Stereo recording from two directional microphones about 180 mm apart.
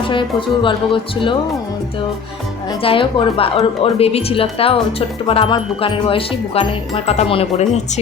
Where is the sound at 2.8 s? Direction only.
30° left (ahead or behind).